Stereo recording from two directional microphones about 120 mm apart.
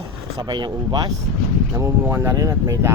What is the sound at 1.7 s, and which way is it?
Speech, 25° right (ahead or behind).